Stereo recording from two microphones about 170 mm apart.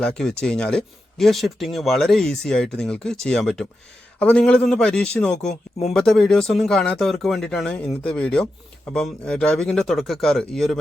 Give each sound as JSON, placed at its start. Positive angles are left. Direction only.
{"t": 0.0, "sound": "a man's voice", "side_deg": 5}